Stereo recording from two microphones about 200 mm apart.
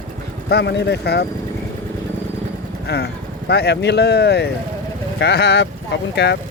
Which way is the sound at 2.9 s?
55° left (ahead or behind).